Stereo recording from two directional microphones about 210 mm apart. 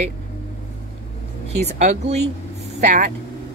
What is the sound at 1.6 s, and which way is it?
Speech, 30° right (ahead or behind).